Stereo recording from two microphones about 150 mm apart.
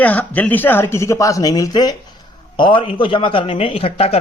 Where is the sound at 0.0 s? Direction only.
10° left (ahead or behind).